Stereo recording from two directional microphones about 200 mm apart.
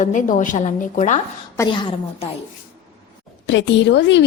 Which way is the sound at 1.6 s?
25° left (ahead or behind).